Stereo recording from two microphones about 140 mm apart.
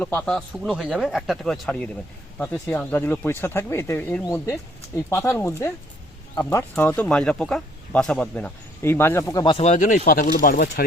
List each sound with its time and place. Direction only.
0.0 s speech: 10° left (ahead or behind)
9.5 s speech: 50° left (ahead or behind); by 10.0 s 65° left (ahead or behind)
10.1 s speech: 85° left